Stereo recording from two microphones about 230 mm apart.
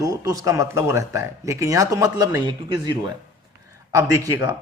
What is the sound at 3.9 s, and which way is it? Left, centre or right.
Speech, centre.